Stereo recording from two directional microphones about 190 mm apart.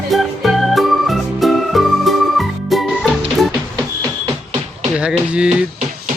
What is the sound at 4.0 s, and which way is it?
Music, 20° right (ahead or behind).